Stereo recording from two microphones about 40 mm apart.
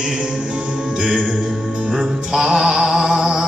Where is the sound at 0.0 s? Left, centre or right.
Centre.